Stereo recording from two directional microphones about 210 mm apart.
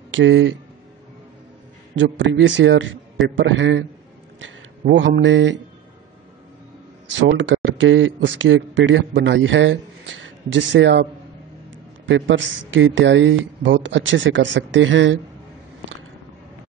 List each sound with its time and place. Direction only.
0.1 s a man's voice: 65° right (ahead or behind)
2.0 s a man's voice: 60° right (ahead or behind)
7.1 s a man's voice: 60° right (ahead or behind)
12.1 s a man's voice: 65° right (ahead or behind)